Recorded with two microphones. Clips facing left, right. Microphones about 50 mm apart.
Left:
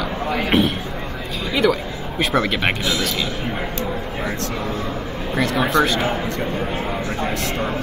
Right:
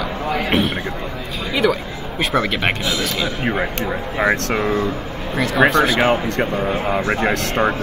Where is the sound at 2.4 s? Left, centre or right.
Centre.